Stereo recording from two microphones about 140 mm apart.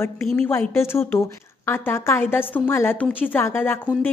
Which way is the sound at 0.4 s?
15° left (ahead or behind).